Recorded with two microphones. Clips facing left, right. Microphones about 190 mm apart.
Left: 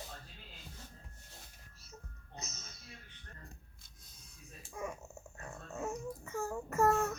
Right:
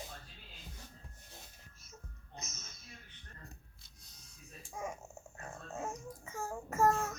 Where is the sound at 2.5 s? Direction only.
60° left (ahead or behind).